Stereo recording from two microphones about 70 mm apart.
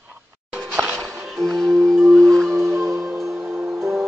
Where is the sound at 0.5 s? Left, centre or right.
Centre.